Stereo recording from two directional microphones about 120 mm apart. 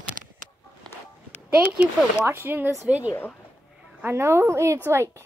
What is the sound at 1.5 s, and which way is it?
A woman's voice, 10° right (ahead or behind).